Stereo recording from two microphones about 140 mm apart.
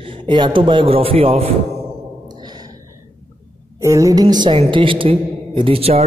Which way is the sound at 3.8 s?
20° right (ahead or behind).